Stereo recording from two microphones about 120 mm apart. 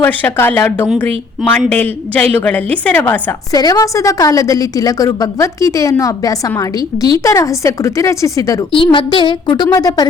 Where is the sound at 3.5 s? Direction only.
30° left (ahead or behind).